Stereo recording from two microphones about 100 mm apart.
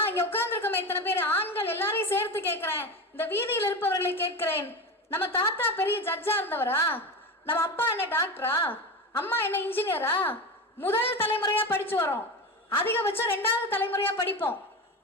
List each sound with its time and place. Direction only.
0.0 s a woman's voice: 20° left (ahead or behind)